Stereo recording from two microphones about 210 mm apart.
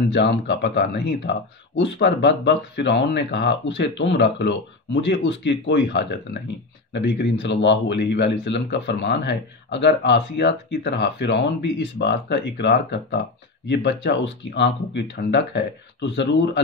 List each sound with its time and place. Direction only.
0.1 s speech: 55° left (ahead or behind)